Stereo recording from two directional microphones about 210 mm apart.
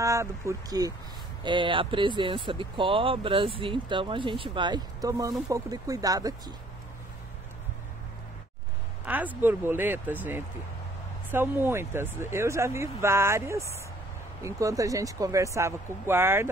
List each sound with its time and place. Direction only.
0.0 s speech: 15° right (ahead or behind)
9.0 s speech: 10° right (ahead or behind)